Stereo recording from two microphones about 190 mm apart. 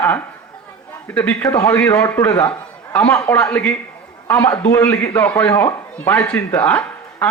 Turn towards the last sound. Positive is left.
turn(degrees=10)  # may be behind; listen again after turning